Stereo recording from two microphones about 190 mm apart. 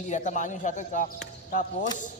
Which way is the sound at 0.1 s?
40° left (ahead or behind).